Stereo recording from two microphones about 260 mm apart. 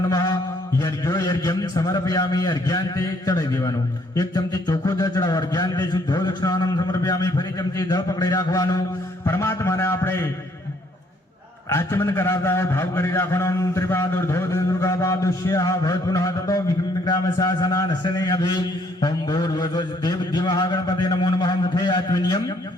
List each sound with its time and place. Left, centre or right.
0.8 s a man's voice: centre
11.7 s a man's voice: centre